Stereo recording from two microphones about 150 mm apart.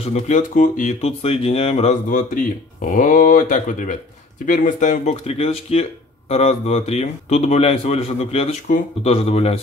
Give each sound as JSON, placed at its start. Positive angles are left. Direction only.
{"t": 0.1, "sound": "speech", "side_deg": 55}
{"t": 2.0, "sound": "speech", "side_deg": 65}